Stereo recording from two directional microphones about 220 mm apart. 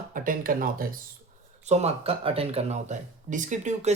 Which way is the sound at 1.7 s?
30° right (ahead or behind).